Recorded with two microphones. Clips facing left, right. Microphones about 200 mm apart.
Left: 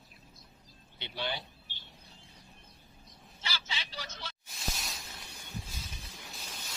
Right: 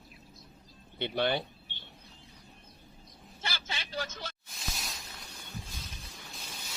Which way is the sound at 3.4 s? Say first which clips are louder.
Right 2 dB; 50° right (ahead or behind).